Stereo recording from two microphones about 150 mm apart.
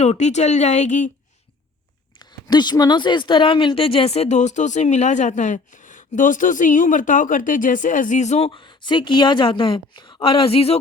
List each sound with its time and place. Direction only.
0.0 s speech: 50° left (ahead or behind)
2.1 s speech: 30° left (ahead or behind)